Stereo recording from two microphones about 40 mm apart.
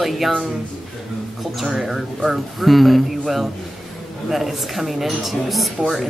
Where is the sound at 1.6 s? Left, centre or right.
Centre.